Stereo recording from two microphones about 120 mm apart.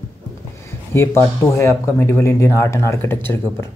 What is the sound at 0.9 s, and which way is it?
Speech, 25° left (ahead or behind).